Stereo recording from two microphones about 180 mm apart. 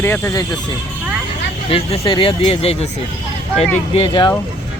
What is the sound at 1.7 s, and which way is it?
Speech, 30° left (ahead or behind).